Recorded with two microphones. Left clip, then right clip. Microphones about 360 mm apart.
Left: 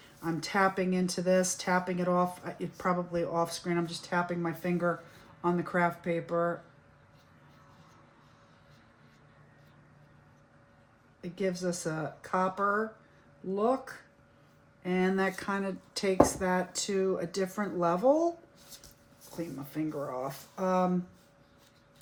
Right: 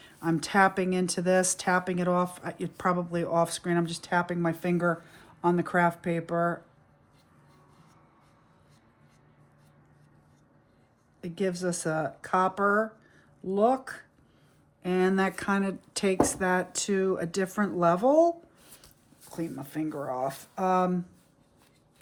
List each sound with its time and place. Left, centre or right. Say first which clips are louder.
0.2 s speech: right 5 dB; right
11.2 s speech: right 3 dB; right
19.4 s speech: right 3 dB; right